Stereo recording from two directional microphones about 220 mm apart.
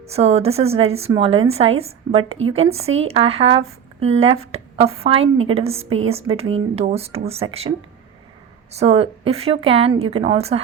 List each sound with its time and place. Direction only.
0.0 s a woman's voice: 30° right (ahead or behind)
8.7 s a woman's voice: 25° right (ahead or behind)